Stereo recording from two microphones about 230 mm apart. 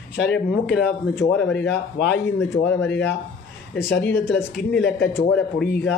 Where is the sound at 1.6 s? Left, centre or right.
Left.